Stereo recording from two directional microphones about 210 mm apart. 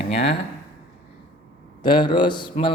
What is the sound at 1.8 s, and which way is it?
Speech, 20° left (ahead or behind).